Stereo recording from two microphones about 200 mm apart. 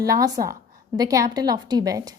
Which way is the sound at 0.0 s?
15° right (ahead or behind).